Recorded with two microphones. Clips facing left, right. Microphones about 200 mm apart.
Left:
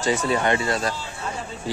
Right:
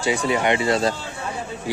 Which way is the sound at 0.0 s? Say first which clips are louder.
Right 1 dB; 10° right (ahead or behind).